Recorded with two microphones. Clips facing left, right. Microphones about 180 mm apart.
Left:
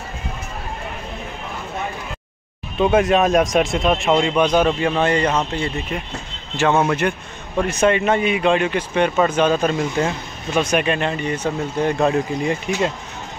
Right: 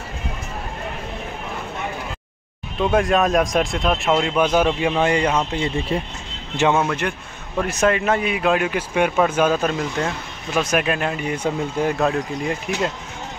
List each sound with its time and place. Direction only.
2.8 s speech: centre (ahead or behind)
5.9 s speech: 30° right (ahead or behind)
7.0 s speech: centre (ahead or behind)